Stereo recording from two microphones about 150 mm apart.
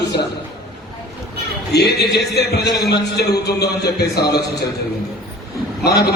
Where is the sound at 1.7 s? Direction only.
90° left.